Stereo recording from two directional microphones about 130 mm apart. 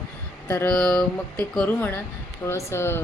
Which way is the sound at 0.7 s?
5° left (ahead or behind).